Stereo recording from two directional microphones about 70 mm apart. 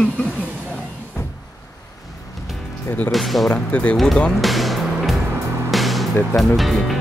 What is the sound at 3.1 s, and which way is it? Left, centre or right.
Speech, centre.